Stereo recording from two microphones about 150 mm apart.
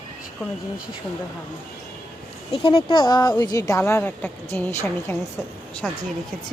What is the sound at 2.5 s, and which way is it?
A woman's voice, 35° left (ahead or behind).